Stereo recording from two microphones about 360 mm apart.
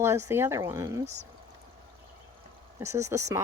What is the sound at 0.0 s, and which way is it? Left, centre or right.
Speech, centre.